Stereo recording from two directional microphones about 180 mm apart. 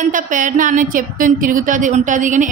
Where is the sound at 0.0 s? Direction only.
45° right (ahead or behind).